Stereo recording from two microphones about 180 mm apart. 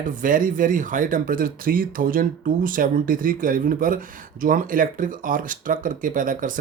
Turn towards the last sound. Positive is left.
turn(degrees=-50)  # may be behind; listen again after turning